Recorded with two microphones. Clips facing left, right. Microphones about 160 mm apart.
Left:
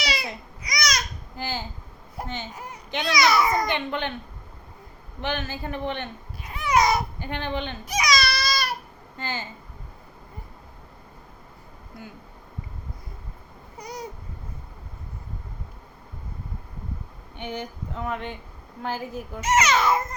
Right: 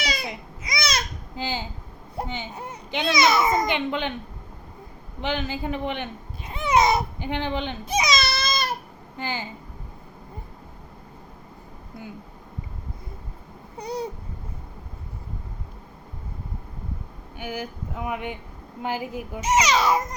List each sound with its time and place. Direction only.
0.3 s babbling: 25° right (ahead or behind)
1.4 s a child's voice: 15° right (ahead or behind)
5.2 s speech: 15° right (ahead or behind)
7.9 s baby cry: 25° right (ahead or behind)
9.1 s a child's voice: 15° right (ahead or behind)
13.7 s babbling: 30° right (ahead or behind)
17.3 s a child's voice: 5° right (ahead or behind)